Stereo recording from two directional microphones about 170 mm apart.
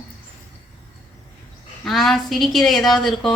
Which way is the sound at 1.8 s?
Centre (ahead or behind).